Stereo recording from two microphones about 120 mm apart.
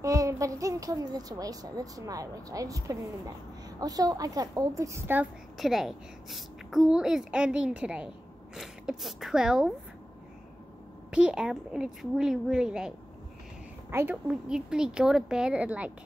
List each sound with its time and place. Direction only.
0.0 s a child's voice: 25° right (ahead or behind)
5.6 s a woman's voice: centre (ahead or behind)
11.1 s a woman's voice: 10° right (ahead or behind)
13.8 s a woman's voice: 20° right (ahead or behind)
14.5 s a woman's voice: 5° right (ahead or behind)